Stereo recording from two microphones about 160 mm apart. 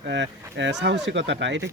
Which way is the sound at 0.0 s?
90° right.